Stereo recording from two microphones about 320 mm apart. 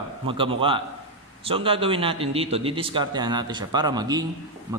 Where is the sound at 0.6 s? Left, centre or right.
Centre.